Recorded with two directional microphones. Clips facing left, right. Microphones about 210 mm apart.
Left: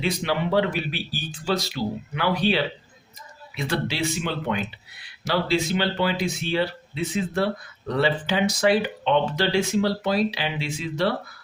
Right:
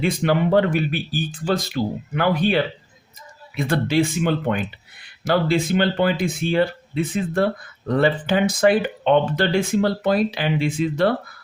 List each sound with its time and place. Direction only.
0.0 s speech: 50° right (ahead or behind)